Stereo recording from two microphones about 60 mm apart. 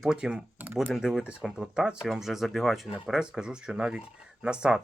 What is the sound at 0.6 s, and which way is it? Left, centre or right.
Speech, right.